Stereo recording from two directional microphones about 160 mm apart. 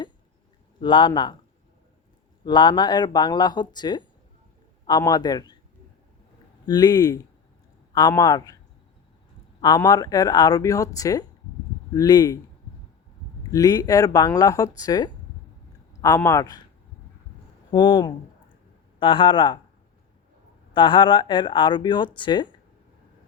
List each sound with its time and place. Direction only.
0.8 s speech: 30° left (ahead or behind)
2.4 s speech: 30° left (ahead or behind)
6.7 s speech: 25° left (ahead or behind)
9.6 s speech: 25° left (ahead or behind)
13.5 s speech: 20° left (ahead or behind)
17.7 s speech: 30° left (ahead or behind)
20.7 s speech: 30° left (ahead or behind)